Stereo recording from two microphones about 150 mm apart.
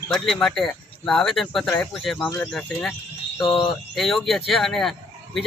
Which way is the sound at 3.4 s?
30° left (ahead or behind).